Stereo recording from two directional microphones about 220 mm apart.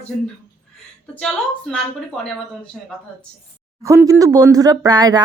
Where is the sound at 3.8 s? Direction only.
15° right (ahead or behind).